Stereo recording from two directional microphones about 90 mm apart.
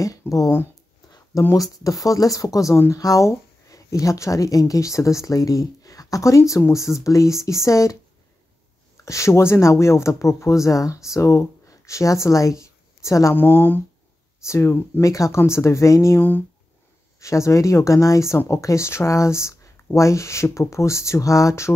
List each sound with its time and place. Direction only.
0.2 s speech: 25° left (ahead or behind)
1.5 s speech: 40° left (ahead or behind)
9.0 s speech: 35° left (ahead or behind)
13.3 s speech: 20° left (ahead or behind)
14.4 s speech: 30° left (ahead or behind)
16.2 s speech: 20° left (ahead or behind)
17.2 s speech: 35° left (ahead or behind)